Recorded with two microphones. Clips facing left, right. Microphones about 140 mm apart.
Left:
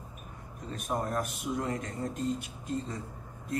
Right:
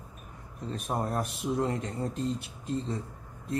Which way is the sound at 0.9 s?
30° right (ahead or behind).